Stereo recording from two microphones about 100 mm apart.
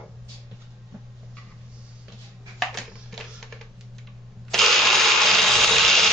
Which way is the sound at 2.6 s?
Centre (ahead or behind).